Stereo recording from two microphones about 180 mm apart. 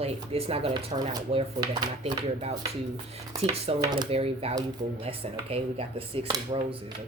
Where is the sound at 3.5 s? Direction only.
30° right (ahead or behind).